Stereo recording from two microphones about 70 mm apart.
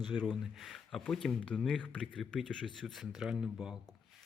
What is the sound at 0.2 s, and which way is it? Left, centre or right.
A man's voice, centre.